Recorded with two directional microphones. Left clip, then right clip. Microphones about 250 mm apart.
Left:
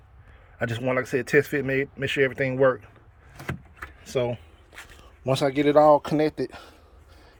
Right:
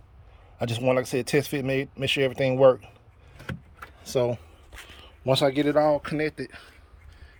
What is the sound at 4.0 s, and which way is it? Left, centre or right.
Speech, centre.